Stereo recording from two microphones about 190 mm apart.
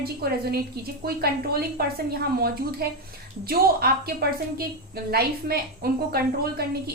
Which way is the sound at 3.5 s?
55° right (ahead or behind).